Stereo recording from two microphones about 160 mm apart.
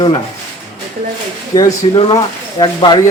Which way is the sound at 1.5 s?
25° left (ahead or behind).